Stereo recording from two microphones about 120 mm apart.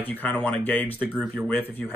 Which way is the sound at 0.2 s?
10° left (ahead or behind).